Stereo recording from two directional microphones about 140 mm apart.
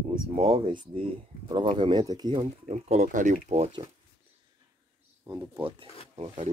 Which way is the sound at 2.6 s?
50° right (ahead or behind).